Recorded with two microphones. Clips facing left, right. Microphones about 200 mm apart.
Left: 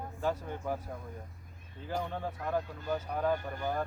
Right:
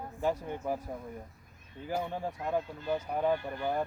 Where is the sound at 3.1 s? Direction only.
10° right (ahead or behind).